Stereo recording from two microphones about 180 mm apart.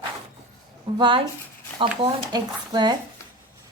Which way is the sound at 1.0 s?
30° right (ahead or behind).